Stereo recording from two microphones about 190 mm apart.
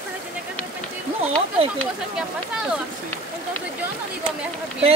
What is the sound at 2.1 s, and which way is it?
Speech, 5° right (ahead or behind).